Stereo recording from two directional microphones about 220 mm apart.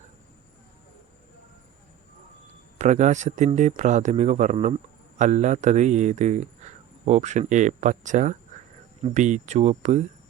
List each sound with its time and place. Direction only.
2.7 s speech: 35° right (ahead or behind)